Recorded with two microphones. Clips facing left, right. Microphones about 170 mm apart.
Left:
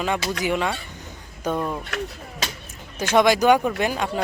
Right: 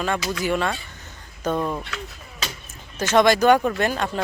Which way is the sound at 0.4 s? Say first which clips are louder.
Right 1 dB; 15° left (ahead or behind).